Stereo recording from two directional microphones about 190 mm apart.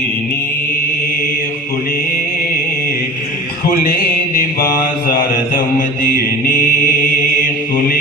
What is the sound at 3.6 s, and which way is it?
Mantra, 45° left (ahead or behind).